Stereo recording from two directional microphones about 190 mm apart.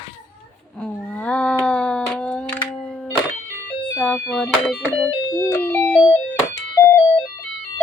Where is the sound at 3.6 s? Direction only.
5° left (ahead or behind).